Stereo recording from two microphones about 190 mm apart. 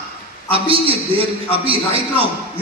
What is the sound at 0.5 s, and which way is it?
A man's voice, 30° right (ahead or behind).